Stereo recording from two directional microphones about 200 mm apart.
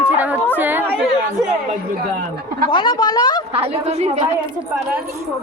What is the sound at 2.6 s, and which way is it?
Speech, 25° left (ahead or behind).